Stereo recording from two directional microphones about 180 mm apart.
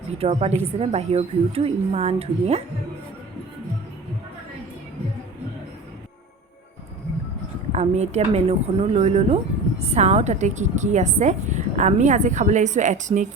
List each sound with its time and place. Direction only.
0.2 s speech: 35° right (ahead or behind)
7.7 s speech: 40° right (ahead or behind)